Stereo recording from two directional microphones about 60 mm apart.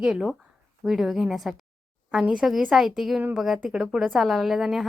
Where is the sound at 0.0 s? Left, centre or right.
Centre.